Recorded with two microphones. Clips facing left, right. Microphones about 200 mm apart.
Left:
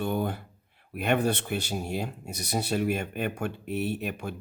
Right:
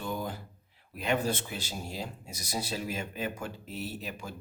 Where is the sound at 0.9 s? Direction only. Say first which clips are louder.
Left 4 dB; 60° left (ahead or behind).